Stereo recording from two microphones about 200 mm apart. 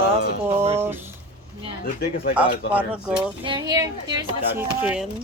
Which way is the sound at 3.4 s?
20° right (ahead or behind).